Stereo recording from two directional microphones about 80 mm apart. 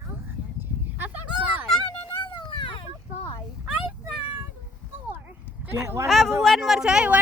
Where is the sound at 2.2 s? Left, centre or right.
Left.